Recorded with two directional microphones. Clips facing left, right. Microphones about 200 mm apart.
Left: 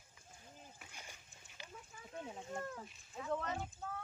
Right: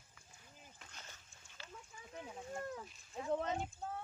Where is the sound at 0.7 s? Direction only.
10° left (ahead or behind).